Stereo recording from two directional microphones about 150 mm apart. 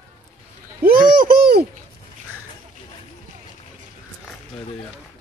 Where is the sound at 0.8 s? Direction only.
70° right (ahead or behind).